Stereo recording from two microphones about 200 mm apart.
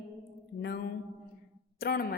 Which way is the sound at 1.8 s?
50° left (ahead or behind).